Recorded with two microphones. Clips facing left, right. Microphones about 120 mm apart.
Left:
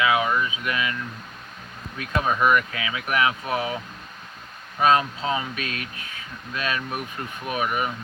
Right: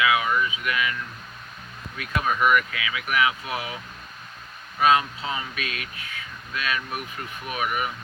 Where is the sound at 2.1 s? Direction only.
25° left (ahead or behind).